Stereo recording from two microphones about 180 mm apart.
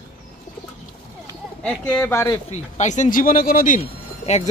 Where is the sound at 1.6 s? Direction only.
5° left (ahead or behind).